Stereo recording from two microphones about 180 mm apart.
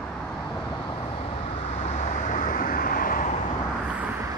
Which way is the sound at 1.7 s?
40° left (ahead or behind).